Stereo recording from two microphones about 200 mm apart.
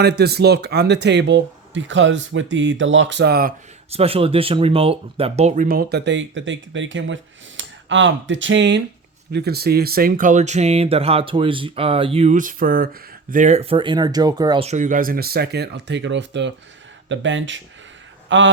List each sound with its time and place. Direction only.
0.0 s speech: 55° right (ahead or behind)
3.9 s speech: 30° right (ahead or behind); by 8.8 s 65° right (ahead or behind)
9.3 s speech: 50° right (ahead or behind); by 14.7 s 20° right (ahead or behind)
14.7 s a man's voice: 40° right (ahead or behind); by 18.5 s 70° right (ahead or behind)